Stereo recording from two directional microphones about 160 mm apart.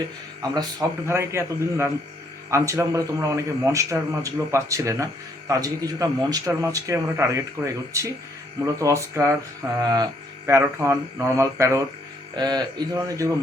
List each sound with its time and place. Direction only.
0.5 s mantra: 25° right (ahead or behind)
2.5 s a man's voice: 20° right (ahead or behind)
9.7 s mantra: 25° right (ahead or behind)
12.4 s a man's voice: 25° right (ahead or behind)